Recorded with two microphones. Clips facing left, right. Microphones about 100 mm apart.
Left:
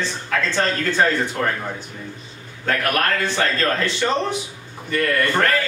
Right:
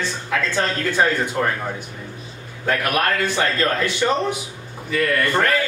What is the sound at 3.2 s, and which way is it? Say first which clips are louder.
A man's voice: even; 10° right (ahead or behind).